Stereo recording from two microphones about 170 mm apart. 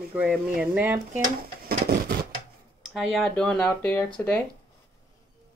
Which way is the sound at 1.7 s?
65° right (ahead or behind).